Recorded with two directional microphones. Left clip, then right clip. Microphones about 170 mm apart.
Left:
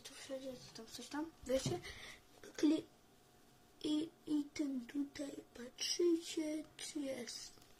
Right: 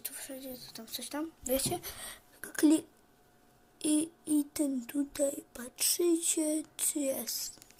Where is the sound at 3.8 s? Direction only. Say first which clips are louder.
Right 8 dB; 25° right (ahead or behind).